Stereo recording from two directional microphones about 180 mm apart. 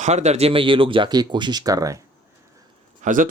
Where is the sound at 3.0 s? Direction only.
45° right (ahead or behind).